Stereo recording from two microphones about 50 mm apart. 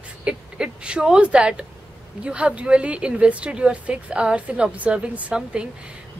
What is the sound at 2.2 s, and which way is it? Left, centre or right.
A woman's voice, right.